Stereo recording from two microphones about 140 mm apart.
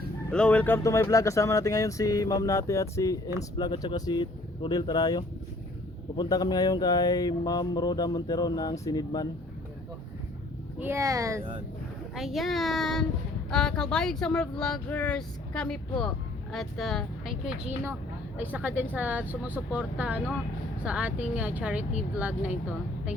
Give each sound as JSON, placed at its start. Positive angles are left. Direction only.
{"t": 0.3, "sound": "speech", "side_deg": 5}
{"t": 10.8, "sound": "speech", "side_deg": -15}
{"t": 12.1, "sound": "speech", "side_deg": 0}